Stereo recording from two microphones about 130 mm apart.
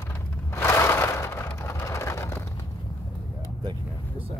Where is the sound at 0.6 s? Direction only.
20° left (ahead or behind).